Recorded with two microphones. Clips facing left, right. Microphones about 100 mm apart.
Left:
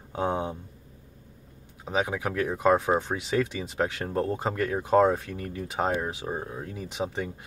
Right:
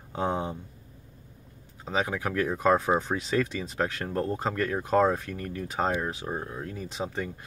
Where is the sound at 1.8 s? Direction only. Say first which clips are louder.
Left 1 dB; 15° left (ahead or behind).